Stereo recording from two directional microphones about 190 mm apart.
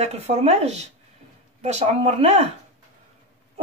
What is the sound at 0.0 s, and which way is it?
Speech, 35° right (ahead or behind).